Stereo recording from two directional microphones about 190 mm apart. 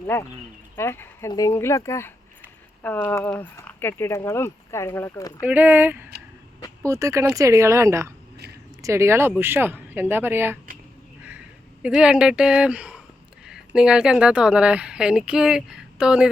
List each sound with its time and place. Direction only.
0.0 s speech: 15° left (ahead or behind)
5.4 s speech: 10° right (ahead or behind)
11.8 s a woman's voice: 5° right (ahead or behind)